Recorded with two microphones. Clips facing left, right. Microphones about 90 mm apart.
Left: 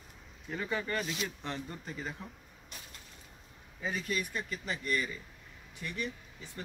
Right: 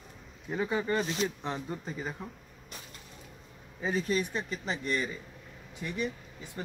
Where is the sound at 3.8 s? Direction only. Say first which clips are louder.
Right 6 dB; 30° right (ahead or behind).